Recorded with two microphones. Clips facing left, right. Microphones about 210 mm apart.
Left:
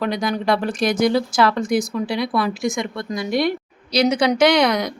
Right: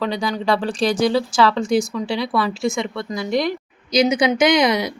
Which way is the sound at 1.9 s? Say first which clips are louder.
Even; 15° left (ahead or behind).